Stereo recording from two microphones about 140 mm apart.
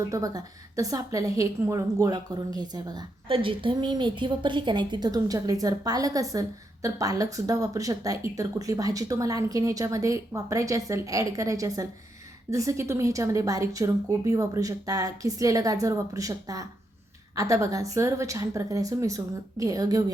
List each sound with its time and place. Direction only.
0.1 s a woman's voice: 25° right (ahead or behind)